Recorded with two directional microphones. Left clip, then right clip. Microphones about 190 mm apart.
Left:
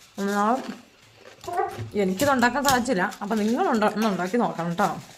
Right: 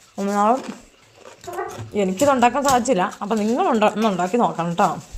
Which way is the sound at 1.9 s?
15° right (ahead or behind).